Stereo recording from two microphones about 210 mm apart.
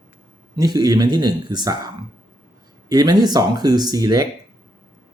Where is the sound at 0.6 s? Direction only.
20° right (ahead or behind).